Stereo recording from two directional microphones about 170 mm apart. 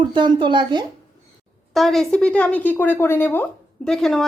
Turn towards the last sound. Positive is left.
turn(degrees=0)  # may be behind; listen again after turning